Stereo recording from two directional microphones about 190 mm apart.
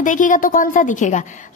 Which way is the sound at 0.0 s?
45° left (ahead or behind).